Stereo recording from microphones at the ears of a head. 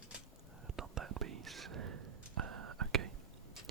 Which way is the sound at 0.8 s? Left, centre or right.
Right.